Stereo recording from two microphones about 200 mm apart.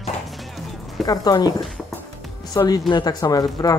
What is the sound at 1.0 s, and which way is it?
Speech, 20° left (ahead or behind).